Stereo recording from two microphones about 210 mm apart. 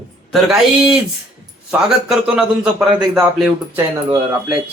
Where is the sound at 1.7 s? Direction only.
5° right (ahead or behind).